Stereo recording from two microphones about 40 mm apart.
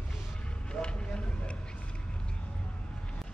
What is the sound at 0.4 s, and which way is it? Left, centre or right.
Vehicle, left.